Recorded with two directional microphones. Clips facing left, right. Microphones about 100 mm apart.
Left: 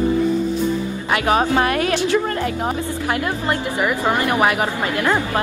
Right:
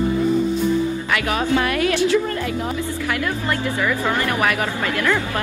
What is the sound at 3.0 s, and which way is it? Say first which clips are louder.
Speech: left 3 dB; 20° left (ahead or behind).